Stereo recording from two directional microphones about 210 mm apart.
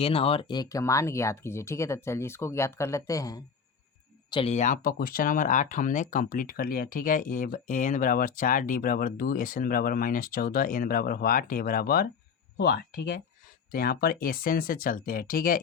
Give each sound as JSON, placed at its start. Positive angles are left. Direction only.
{"t": 0.0, "sound": "speech", "side_deg": 25}
{"t": 4.3, "sound": "speech", "side_deg": 25}